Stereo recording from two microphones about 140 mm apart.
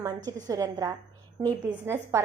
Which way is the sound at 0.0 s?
25° right (ahead or behind).